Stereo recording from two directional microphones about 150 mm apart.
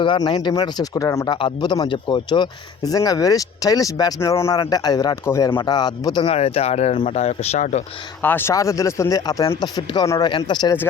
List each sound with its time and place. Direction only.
0.0 s speech: 30° left (ahead or behind)
6.2 s speech: 40° left (ahead or behind)
8.2 s speech: 15° left (ahead or behind); by 10.8 s 30° left (ahead or behind)